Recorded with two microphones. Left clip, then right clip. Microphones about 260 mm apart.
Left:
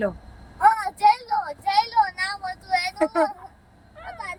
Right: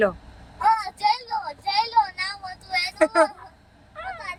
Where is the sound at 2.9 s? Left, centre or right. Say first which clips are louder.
Right 6 dB; centre.